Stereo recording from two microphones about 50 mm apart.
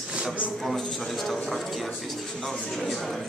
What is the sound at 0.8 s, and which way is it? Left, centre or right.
Speech, centre.